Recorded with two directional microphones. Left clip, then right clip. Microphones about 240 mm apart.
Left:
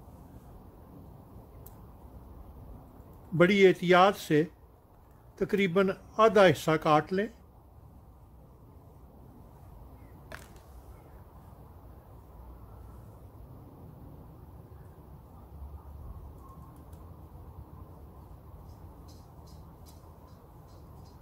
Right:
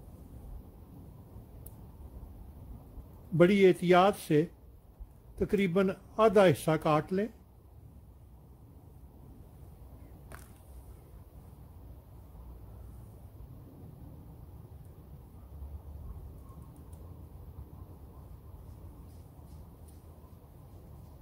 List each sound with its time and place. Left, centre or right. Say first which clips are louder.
3.3 s speech: left 2 dB; centre